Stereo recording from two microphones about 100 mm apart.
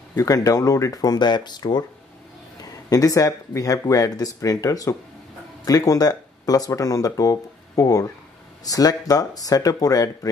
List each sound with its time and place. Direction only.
0.1 s speech: 35° left (ahead or behind)